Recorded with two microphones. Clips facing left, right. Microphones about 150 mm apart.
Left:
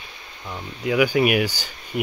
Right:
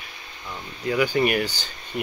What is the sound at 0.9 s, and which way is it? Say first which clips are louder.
Speech: left 3 dB; 10° left (ahead or behind).